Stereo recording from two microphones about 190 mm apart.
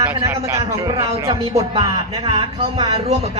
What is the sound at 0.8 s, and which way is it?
Speech, 30° right (ahead or behind).